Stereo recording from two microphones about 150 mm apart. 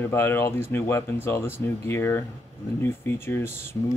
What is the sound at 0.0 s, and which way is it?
Speech, 15° left (ahead or behind).